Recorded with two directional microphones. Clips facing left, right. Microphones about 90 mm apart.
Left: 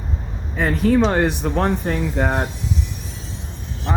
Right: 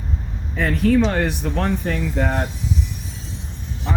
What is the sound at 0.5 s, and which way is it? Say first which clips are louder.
Speech: even; 25° left (ahead or behind).